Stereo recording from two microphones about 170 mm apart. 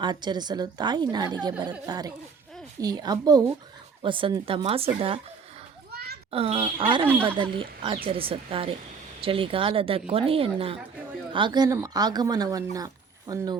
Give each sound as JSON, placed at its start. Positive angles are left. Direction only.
{"t": 0.0, "sound": "speech", "side_deg": -25}
{"t": 5.9, "sound": "a sound", "side_deg": -65}
{"t": 6.3, "sound": "speech", "side_deg": -35}
{"t": 7.0, "sound": "speech", "side_deg": -10}
{"t": 7.3, "sound": "speech", "side_deg": -30}